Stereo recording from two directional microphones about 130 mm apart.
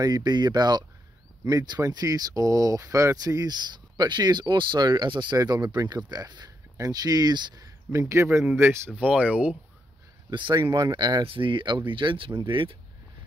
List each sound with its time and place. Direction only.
0.0 s speech: 30° right (ahead or behind); by 9.6 s 10° right (ahead or behind)
10.3 s speech: 40° right (ahead or behind)
10.6 s speech: 25° right (ahead or behind); by 12.7 s 40° right (ahead or behind)